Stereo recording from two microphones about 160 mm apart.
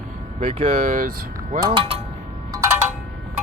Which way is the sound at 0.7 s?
65° right (ahead or behind).